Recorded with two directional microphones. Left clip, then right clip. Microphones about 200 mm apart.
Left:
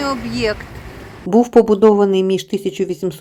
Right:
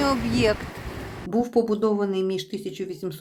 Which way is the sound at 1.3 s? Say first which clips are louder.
Left 11 dB; 30° left (ahead or behind).